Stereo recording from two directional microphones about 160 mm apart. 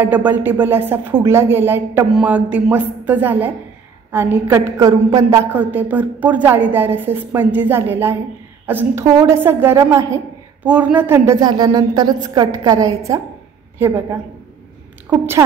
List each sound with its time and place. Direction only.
0.0 s a woman's voice: 10° right (ahead or behind)
10.6 s a woman's voice: 10° right (ahead or behind)
15.0 s a woman's voice: 15° right (ahead or behind)